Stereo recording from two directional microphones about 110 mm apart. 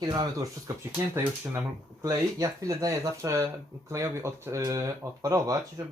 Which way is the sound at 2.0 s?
30° right (ahead or behind).